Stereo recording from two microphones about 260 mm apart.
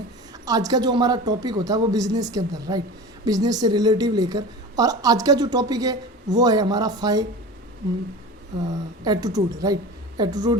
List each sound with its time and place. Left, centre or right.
0.4 s a woman's voice: centre
9.0 s a woman's voice: centre